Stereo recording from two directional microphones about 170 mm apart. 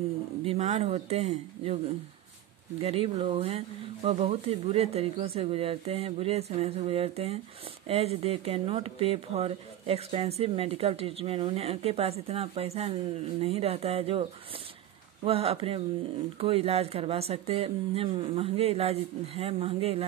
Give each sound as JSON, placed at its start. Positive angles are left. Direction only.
{"t": 0.5, "sound": "speech", "side_deg": -40}
{"t": 2.8, "sound": "speech", "side_deg": -35}
{"t": 15.2, "sound": "speech", "side_deg": -35}